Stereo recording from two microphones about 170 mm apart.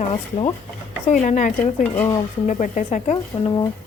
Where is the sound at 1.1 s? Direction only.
45° left (ahead or behind).